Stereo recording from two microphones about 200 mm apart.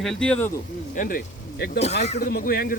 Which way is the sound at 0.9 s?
45° left (ahead or behind).